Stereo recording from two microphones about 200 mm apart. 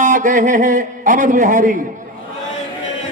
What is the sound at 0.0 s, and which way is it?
A man's voice, 40° right (ahead or behind).